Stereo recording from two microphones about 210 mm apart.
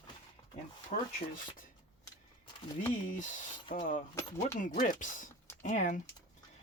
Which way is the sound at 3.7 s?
40° left (ahead or behind).